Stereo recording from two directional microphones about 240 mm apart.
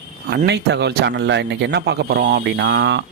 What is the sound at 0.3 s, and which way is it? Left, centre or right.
Speech, right.